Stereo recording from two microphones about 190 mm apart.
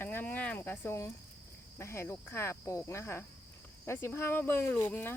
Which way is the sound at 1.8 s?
15° left (ahead or behind).